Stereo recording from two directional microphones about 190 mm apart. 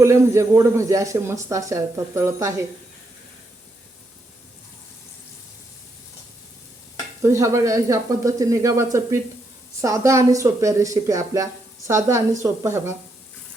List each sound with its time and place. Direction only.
0.0 s speech: 15° right (ahead or behind)
7.2 s speech: 15° right (ahead or behind)